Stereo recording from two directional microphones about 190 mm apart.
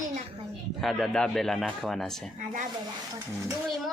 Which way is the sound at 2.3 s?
40° right (ahead or behind).